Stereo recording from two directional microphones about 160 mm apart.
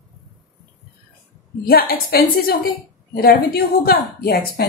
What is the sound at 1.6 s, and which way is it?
A woman's voice, 70° left (ahead or behind).